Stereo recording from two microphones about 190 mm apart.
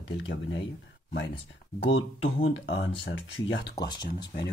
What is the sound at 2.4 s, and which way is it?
Speech, 75° left (ahead or behind).